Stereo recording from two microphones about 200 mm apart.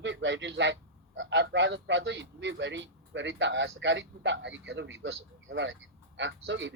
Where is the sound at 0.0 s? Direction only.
65° right (ahead or behind).